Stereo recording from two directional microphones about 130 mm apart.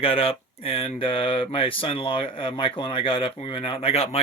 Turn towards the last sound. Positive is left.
turn(degrees=50)  # may be behind; listen again after turning